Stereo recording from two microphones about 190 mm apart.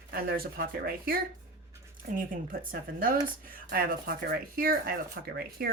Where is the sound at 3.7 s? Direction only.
50° right (ahead or behind).